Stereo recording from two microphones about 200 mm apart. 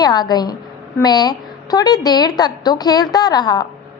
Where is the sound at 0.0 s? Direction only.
20° left (ahead or behind).